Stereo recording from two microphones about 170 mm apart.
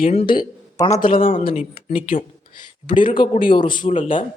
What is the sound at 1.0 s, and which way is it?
Speech, 55° left (ahead or behind).